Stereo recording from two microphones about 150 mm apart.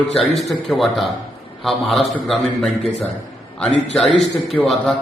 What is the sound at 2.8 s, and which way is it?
Speech, 45° left (ahead or behind).